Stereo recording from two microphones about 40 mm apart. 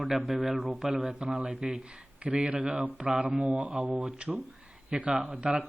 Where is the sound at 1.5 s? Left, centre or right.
Right.